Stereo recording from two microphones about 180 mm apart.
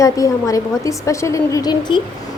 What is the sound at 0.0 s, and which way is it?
A woman's voice, 20° left (ahead or behind).